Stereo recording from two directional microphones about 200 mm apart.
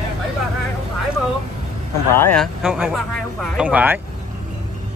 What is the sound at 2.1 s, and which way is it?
Speech, 10° left (ahead or behind).